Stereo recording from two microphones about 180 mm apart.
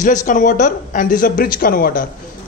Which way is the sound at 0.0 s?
45° left (ahead or behind).